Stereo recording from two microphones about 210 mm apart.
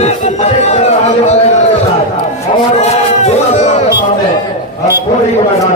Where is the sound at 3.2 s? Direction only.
35° left (ahead or behind).